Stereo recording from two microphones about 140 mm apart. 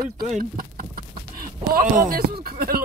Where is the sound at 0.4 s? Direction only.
90° right.